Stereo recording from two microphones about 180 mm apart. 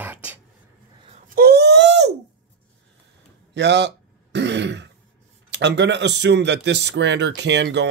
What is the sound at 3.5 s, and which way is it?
Speech, 75° right (ahead or behind).